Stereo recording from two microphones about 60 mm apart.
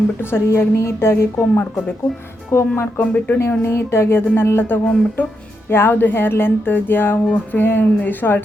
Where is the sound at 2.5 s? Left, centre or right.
Left.